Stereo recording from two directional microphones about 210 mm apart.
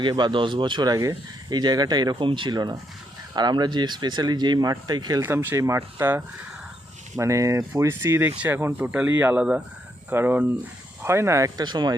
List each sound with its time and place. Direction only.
0.0 s speech: 20° right (ahead or behind)